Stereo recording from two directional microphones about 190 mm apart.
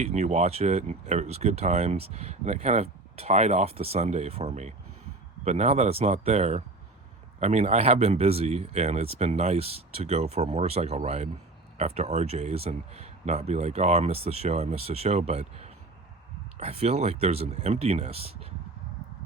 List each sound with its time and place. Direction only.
0.0 s speech: 35° right (ahead or behind)